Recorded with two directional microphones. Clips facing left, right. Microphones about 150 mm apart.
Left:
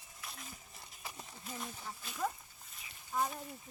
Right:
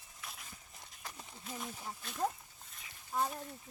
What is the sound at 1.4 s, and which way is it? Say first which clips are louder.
Speech: right 1 dB; centre (ahead or behind).